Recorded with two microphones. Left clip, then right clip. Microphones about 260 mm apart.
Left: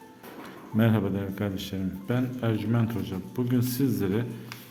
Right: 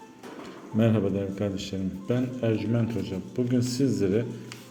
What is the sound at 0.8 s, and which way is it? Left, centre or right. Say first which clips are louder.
A man's voice: right 2 dB; centre.